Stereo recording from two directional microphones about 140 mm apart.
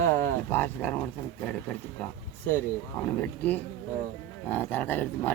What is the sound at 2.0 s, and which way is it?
Speech, 10° left (ahead or behind).